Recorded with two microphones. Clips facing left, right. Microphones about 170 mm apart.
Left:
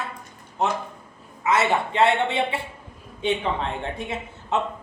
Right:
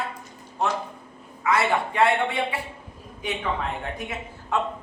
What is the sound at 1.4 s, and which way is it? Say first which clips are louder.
A man's voice: left 1 dB; 20° left (ahead or behind).